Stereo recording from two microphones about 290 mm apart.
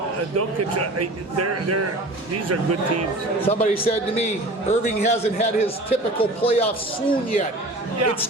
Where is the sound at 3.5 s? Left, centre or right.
Left.